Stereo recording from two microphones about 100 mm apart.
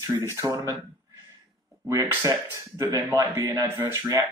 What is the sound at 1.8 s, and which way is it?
Speech, 30° right (ahead or behind).